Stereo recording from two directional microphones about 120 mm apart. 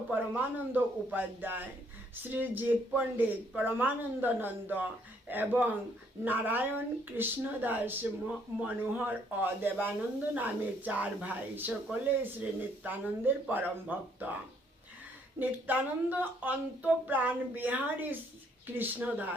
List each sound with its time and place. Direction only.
0.1 s speech: 15° right (ahead or behind)
15.4 s speech: 15° right (ahead or behind)